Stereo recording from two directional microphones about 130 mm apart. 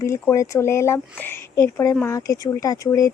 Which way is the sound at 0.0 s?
20° left (ahead or behind).